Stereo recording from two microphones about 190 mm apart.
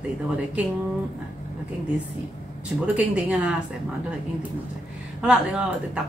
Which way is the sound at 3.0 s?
5° right (ahead or behind).